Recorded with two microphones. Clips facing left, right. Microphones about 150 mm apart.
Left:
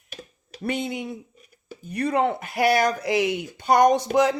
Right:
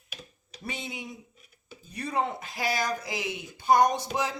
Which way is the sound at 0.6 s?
60° left (ahead or behind).